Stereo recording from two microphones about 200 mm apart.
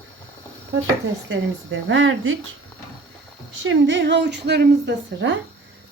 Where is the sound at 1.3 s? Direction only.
70° right (ahead or behind).